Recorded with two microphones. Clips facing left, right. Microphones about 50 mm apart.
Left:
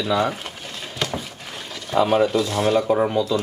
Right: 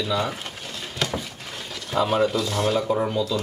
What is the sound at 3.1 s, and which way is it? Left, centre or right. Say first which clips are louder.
Speech: left 4 dB; centre.